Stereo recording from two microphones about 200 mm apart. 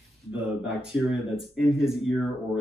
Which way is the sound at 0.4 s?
Centre (ahead or behind).